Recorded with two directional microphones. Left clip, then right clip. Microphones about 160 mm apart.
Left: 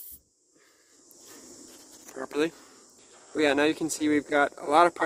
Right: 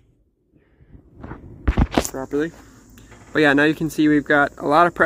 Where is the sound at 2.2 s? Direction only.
40° left (ahead or behind).